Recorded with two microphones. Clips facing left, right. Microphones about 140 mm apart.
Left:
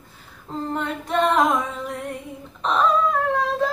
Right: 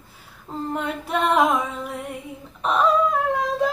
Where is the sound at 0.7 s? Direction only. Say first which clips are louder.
Left 2 dB; 10° right (ahead or behind).